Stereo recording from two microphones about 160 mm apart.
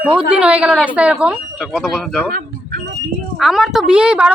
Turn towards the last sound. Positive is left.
turn(degrees=-5)  # may be behind; listen again after turning